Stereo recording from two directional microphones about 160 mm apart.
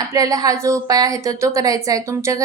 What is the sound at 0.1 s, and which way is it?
A woman's voice, 20° right (ahead or behind).